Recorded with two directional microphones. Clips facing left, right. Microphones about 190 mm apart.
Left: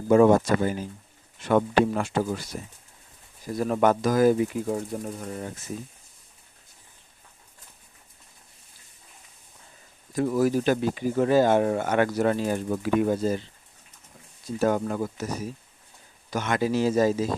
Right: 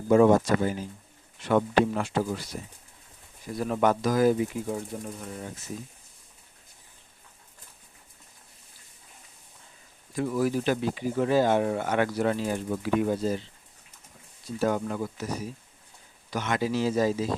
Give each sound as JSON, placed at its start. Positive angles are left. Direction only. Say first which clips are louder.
{"t": 0.1, "sound": "speech", "louder": "left 2 dB", "side_deg": 50}
{"t": 3.4, "sound": "speech", "louder": "left 3 dB", "side_deg": 45}
{"t": 10.2, "sound": "speech", "louder": "left 4 dB", "side_deg": 40}
{"t": 14.6, "sound": "speech", "louder": "left 3 dB", "side_deg": 45}